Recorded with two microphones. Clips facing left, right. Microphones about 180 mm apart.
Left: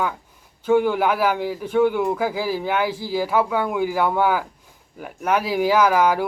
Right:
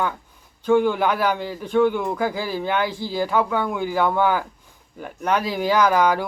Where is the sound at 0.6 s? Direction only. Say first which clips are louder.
Even; 5° left (ahead or behind).